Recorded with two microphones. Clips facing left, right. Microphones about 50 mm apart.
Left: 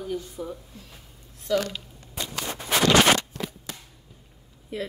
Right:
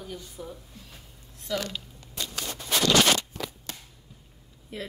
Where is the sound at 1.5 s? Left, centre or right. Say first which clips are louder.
Left 6 dB; left.